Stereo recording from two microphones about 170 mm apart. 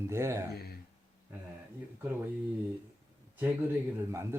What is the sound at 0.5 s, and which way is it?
Speech, 65° left (ahead or behind).